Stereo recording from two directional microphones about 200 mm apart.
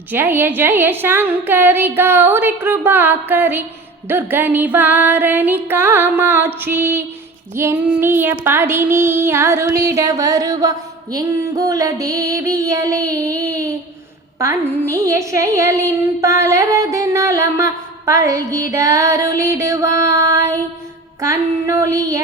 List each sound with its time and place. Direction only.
0.1 s child singing: 10° right (ahead or behind)